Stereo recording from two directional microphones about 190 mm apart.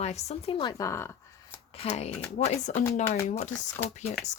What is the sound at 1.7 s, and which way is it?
A woman's voice, 30° left (ahead or behind).